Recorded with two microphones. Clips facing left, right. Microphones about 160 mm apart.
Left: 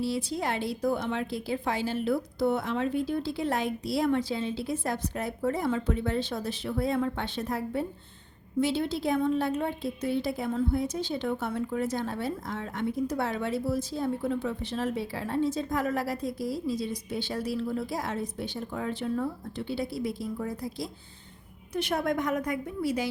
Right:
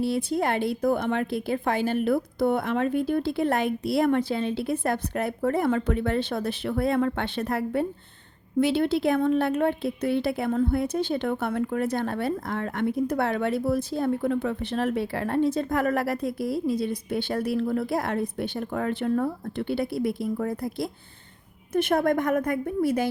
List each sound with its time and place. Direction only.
0.0 s a woman's voice: 55° right (ahead or behind)